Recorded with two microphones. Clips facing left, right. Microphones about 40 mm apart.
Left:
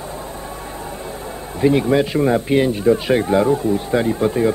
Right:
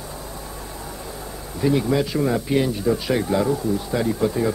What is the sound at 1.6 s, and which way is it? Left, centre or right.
Speech, left.